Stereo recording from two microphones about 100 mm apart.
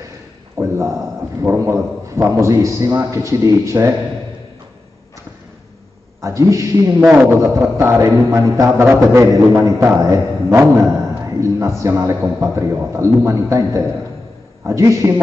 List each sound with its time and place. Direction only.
0.6 s a man's voice: 30° right (ahead or behind)
6.2 s a man's voice: 30° right (ahead or behind)
7.0 s a man's voice: 20° right (ahead or behind)